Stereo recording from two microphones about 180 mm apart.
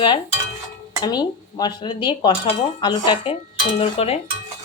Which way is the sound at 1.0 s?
25° left (ahead or behind).